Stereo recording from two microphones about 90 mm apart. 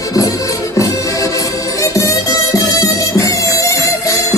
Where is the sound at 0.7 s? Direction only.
35° left (ahead or behind).